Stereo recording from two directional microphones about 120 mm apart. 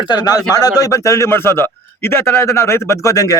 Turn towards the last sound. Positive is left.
turn(degrees=25)  # may be behind; listen again after turning